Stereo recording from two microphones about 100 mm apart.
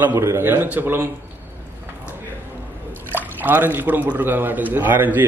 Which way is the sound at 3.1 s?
20° right (ahead or behind).